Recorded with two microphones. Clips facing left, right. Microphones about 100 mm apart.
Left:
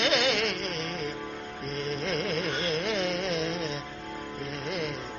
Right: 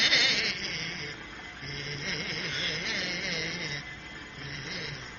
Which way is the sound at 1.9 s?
50° left (ahead or behind).